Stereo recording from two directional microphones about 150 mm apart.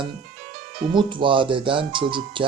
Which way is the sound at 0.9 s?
35° right (ahead or behind).